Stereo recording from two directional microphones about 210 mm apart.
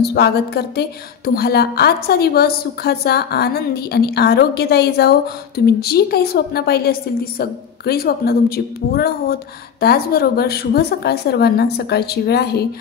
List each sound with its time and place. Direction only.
0.0 s a woman's voice: 50° left (ahead or behind)